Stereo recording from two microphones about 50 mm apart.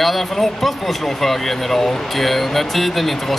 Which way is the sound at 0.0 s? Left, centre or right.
Centre.